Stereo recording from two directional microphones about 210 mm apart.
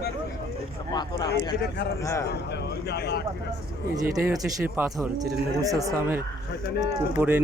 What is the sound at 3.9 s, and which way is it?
Speech, 15° right (ahead or behind).